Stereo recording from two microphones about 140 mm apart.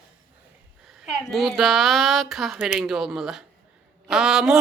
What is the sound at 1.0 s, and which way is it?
A woman's voice, centre (ahead or behind).